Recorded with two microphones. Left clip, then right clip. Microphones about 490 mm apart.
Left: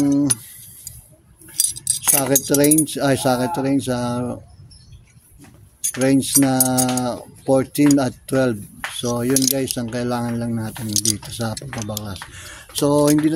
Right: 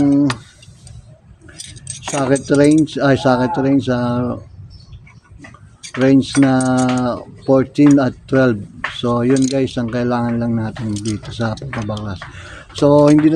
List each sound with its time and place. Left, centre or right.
0.0 s speech: left
2.1 s speech: left
5.9 s speech: left